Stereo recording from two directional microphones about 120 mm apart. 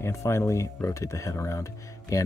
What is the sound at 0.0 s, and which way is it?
Speech, 25° left (ahead or behind).